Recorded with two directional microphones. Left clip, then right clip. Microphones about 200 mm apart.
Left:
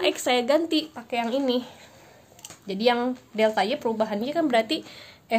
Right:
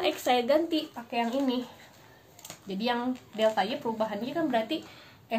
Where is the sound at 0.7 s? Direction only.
50° left (ahead or behind).